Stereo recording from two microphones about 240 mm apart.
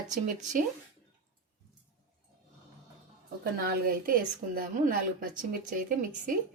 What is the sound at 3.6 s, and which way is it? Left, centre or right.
Speech, right.